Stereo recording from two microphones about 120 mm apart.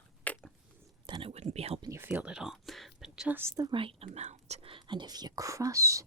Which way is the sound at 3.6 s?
45° right (ahead or behind).